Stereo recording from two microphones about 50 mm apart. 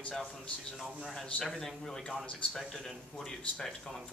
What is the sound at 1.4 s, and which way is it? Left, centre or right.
A man's voice, centre.